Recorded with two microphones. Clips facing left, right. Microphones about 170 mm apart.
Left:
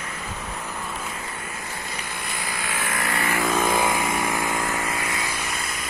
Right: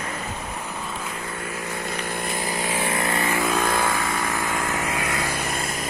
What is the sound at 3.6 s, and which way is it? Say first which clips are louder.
Vehicle: left 1 dB; 20° left (ahead or behind).